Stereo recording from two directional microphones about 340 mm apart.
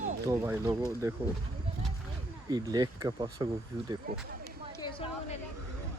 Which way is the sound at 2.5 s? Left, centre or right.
Centre.